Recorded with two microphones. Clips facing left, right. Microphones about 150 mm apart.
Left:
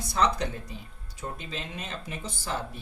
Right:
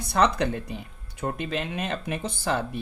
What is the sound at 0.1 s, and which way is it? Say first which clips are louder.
Speech: right 4 dB; 65° right (ahead or behind).